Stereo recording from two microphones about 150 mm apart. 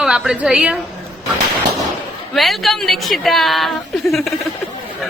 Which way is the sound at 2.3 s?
Centre (ahead or behind).